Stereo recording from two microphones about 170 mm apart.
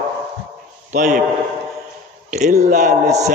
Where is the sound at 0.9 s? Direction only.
45° right (ahead or behind).